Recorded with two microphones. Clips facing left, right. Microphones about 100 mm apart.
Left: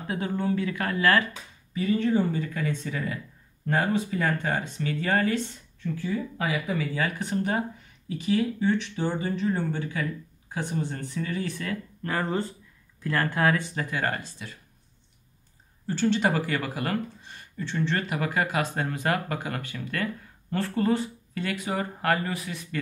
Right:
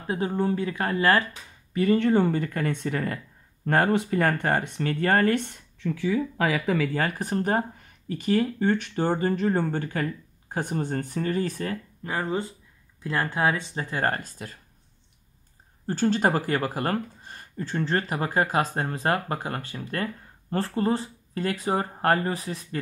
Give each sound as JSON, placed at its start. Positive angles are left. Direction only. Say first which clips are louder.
{"t": 0.0, "sound": "speech", "louder": "right 3 dB", "side_deg": -30}
{"t": 1.7, "sound": "speech", "louder": "right 3 dB", "side_deg": -65}
{"t": 7.0, "sound": "speech", "louder": "right 1 dB", "side_deg": -45}
{"t": 12.0, "sound": "speech", "louder": "even", "side_deg": -15}
{"t": 15.9, "sound": "speech", "louder": "right 1 dB", "side_deg": -40}